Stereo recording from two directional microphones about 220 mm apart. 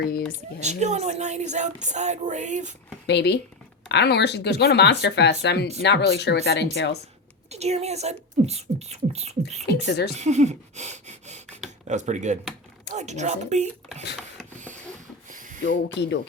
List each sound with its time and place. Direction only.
0.6 s speech: 30° right (ahead or behind)
3.1 s speech: 50° left (ahead or behind)
7.5 s speech: 30° right (ahead or behind)
9.6 s speech: 50° left (ahead or behind)
10.1 s speech: 30° right (ahead or behind)
14.2 s printer: centre (ahead or behind)
15.3 s a sound: 35° right (ahead or behind)
15.6 s speech: 55° left (ahead or behind)